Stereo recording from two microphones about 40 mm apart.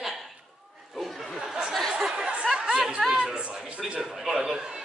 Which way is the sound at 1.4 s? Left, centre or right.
Centre.